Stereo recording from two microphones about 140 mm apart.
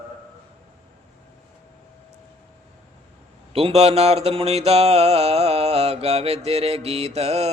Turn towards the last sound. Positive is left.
turn(degrees=-50)  # may be behind; listen again after turning